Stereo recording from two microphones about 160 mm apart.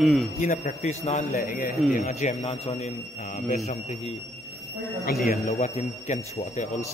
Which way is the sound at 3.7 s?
45° left (ahead or behind).